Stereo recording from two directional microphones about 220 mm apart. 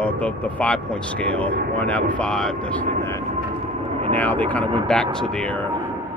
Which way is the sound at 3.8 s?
25° right (ahead or behind).